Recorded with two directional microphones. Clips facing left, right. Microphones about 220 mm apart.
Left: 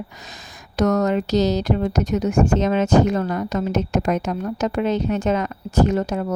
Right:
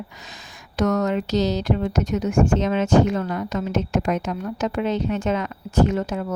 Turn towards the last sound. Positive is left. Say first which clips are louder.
# left 2 dB
turn(degrees=40)  # may be behind; listen again after turning